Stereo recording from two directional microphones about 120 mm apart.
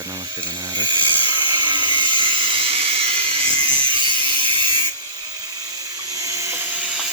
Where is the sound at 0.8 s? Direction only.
40° right (ahead or behind).